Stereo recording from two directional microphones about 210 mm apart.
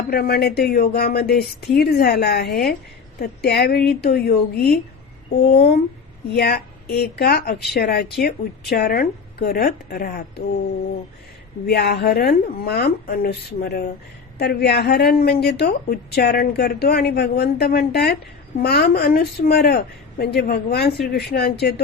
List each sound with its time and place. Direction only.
0.1 s a woman's voice: 50° left (ahead or behind)
6.3 s a woman's voice: 50° left (ahead or behind)
11.6 s a woman's voice: 50° left (ahead or behind)